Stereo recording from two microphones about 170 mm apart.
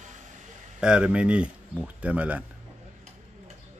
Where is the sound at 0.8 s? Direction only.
5° right (ahead or behind).